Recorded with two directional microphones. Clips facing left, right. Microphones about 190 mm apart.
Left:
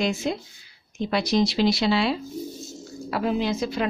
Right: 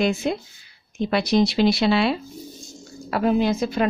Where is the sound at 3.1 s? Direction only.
55° right (ahead or behind).